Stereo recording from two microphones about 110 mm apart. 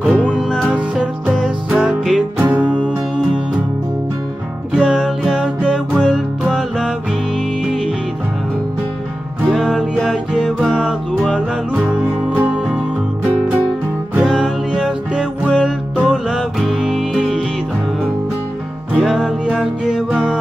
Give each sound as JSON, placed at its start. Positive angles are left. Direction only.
{"t": 0.2, "sound": "music", "side_deg": -5}
{"t": 4.7, "sound": "music", "side_deg": -5}
{"t": 9.5, "sound": "music", "side_deg": 0}
{"t": 14.2, "sound": "music", "side_deg": -5}
{"t": 18.9, "sound": "music", "side_deg": 0}